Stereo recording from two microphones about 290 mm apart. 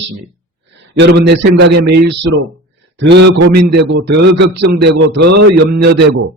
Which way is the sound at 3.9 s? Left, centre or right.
Right.